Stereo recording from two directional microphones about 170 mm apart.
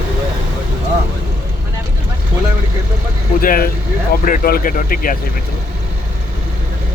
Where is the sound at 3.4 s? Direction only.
55° left (ahead or behind).